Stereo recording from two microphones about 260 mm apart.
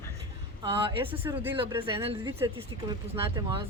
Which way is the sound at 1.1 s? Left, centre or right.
Centre.